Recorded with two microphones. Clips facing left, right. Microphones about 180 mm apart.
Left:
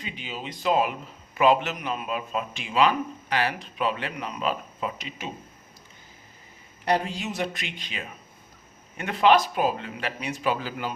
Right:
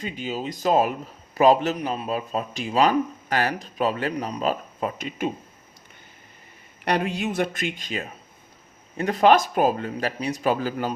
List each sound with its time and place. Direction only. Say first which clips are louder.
0.0 s speech: right 7 dB; 40° right (ahead or behind)
6.8 s speech: right 2 dB; 65° right (ahead or behind); by 10.9 s 45° right (ahead or behind)